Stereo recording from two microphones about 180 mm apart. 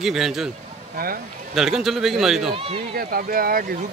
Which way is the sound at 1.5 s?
Centre (ahead or behind).